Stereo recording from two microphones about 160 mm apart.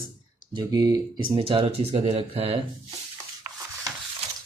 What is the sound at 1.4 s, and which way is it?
Speech, 35° right (ahead or behind).